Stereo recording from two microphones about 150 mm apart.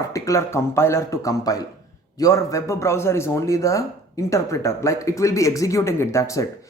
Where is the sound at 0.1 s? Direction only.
20° left (ahead or behind).